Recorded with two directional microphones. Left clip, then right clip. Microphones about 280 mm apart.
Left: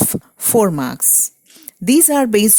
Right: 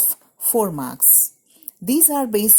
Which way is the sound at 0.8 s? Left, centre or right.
Left.